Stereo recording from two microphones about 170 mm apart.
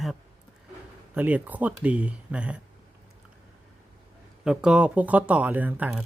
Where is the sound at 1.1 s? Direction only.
10° right (ahead or behind).